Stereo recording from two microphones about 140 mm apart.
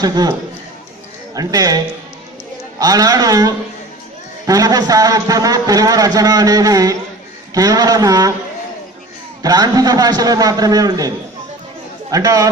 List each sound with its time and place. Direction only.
0.0 s a man's voice: 30° right (ahead or behind)
1.4 s a man's voice: 25° right (ahead or behind)
9.4 s a man's voice: 25° right (ahead or behind)
12.1 s a man's voice: 25° right (ahead or behind)